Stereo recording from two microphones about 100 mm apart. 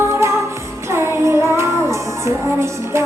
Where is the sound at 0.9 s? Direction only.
25° right (ahead or behind).